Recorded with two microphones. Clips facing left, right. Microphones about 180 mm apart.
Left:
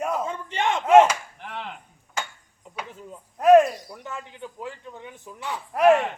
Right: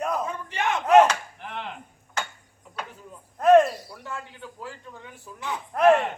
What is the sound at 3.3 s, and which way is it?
Speech, 10° left (ahead or behind).